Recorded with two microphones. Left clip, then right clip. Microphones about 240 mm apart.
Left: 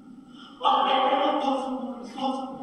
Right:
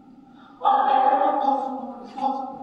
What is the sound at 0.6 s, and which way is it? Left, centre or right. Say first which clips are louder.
Choir: right 3 dB; left.